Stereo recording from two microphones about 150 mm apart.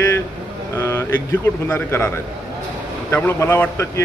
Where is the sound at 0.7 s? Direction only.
15° left (ahead or behind).